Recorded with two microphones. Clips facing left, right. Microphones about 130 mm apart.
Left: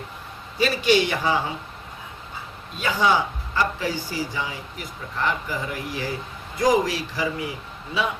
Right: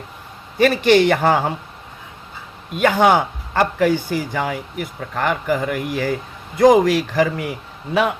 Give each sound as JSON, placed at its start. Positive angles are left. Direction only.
{"t": 0.6, "sound": "speech", "side_deg": -55}
{"t": 2.7, "sound": "speech", "side_deg": -65}